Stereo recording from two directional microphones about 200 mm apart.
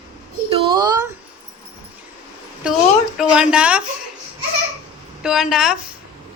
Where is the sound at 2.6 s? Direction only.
5° right (ahead or behind).